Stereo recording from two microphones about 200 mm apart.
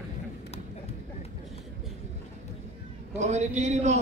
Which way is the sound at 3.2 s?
35° right (ahead or behind).